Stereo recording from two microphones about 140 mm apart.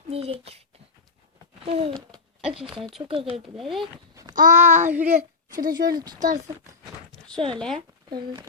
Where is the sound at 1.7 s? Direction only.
45° right (ahead or behind).